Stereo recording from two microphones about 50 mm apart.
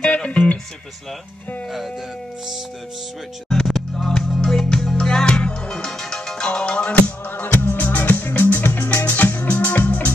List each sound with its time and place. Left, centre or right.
0.1 s music: left
3.4 s music: centre
7.0 s music: left